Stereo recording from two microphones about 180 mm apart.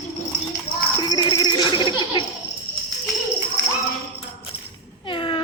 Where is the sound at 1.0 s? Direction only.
20° left (ahead or behind).